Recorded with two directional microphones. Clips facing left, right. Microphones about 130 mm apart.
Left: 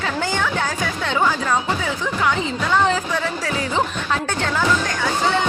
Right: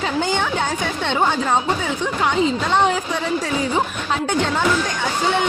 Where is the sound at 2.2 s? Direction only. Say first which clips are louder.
Right 3 dB; 20° right (ahead or behind).